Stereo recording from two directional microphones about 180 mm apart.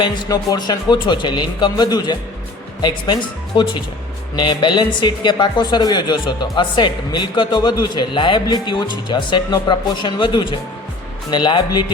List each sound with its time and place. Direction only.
0.0 s speech: 25° left (ahead or behind)